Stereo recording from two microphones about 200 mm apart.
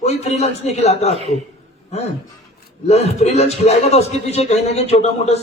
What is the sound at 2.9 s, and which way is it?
A man's voice, 35° left (ahead or behind).